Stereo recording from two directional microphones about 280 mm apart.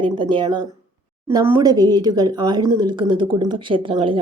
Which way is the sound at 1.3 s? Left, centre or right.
Centre.